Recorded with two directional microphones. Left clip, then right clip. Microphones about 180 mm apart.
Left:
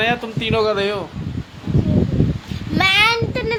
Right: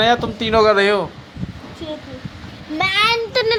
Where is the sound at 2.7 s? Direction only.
40° left (ahead or behind).